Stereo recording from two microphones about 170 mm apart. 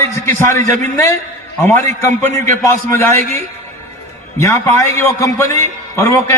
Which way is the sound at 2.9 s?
15° left (ahead or behind).